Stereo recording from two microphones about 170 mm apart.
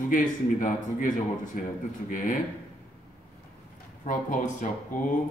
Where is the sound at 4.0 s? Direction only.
50° left (ahead or behind).